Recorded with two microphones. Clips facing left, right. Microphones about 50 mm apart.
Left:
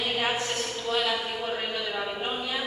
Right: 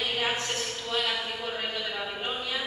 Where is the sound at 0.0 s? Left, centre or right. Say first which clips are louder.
Left 2 dB; centre.